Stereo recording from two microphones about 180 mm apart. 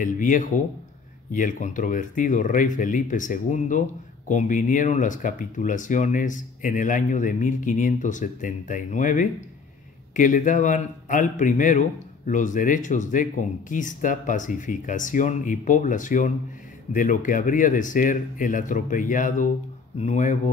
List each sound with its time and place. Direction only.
0.0 s speech: 45° left (ahead or behind)